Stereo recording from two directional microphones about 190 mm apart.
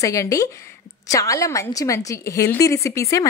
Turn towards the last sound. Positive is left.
turn(degrees=15)  # may be behind; listen again after turning